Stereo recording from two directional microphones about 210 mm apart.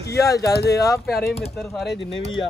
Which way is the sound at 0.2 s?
15° left (ahead or behind).